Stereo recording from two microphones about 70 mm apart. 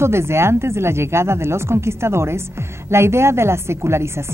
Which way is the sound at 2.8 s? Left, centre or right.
Right.